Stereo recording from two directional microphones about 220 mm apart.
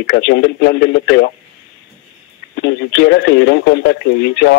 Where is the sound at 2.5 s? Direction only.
55° left (ahead or behind).